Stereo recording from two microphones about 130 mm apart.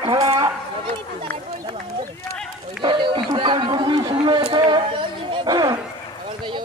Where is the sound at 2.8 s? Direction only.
40° right (ahead or behind).